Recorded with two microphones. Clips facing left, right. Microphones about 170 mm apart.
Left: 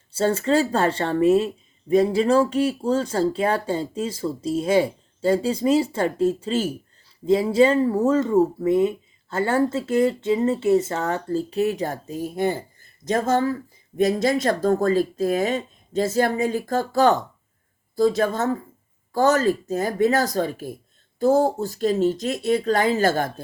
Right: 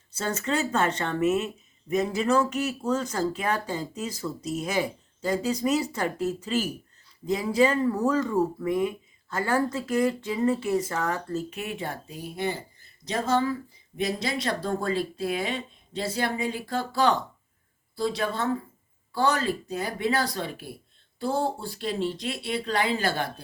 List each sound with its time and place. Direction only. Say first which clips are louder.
0.1 s speech: left 8 dB; 30° left (ahead or behind)